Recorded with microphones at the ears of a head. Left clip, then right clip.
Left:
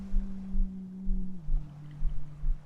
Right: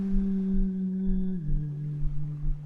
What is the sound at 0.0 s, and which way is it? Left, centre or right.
Music, right.